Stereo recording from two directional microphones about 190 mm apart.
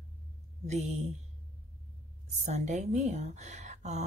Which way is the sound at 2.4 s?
35° right (ahead or behind).